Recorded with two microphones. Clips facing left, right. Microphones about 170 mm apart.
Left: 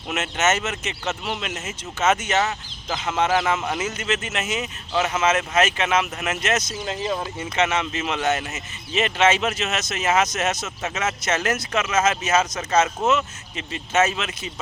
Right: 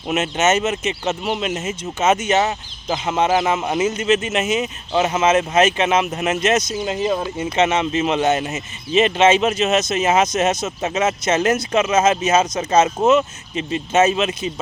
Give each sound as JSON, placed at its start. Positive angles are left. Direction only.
{"t": 0.1, "sound": "speech", "side_deg": -15}
{"t": 2.4, "sound": "speech", "side_deg": -30}
{"t": 2.9, "sound": "speech", "side_deg": -20}